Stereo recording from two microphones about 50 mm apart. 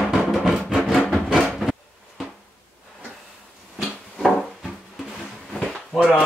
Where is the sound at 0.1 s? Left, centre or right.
Centre.